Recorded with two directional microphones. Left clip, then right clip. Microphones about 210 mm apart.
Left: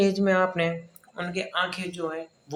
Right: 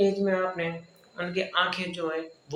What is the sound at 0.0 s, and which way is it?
Speech, 50° left (ahead or behind).